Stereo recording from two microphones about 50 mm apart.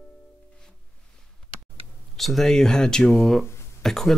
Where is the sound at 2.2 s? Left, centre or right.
Centre.